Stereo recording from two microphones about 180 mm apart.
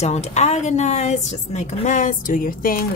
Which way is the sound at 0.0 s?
40° left (ahead or behind).